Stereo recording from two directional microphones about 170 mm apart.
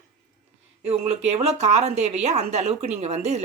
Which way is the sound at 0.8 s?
40° right (ahead or behind).